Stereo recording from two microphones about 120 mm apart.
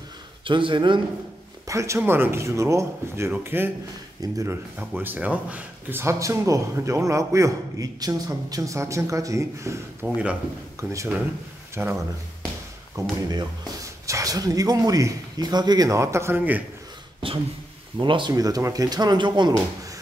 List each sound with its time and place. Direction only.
0.5 s a man's voice: 45° right (ahead or behind)
1.7 s speech: 25° right (ahead or behind)
4.2 s speech: 30° right (ahead or behind)
4.7 s speech: 15° right (ahead or behind)
11.8 s speech: 15° right (ahead or behind)
13.0 s speech: 25° right (ahead or behind)
17.9 s speech: 40° right (ahead or behind)
18.3 s speech: 30° right (ahead or behind)